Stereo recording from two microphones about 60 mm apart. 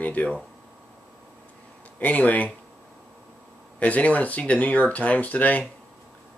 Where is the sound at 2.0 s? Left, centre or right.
Left.